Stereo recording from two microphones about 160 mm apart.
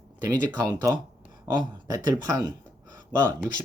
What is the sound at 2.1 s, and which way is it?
Speech, 20° right (ahead or behind).